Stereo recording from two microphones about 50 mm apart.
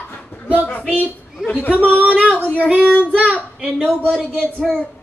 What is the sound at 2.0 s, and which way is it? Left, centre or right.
Speech, right.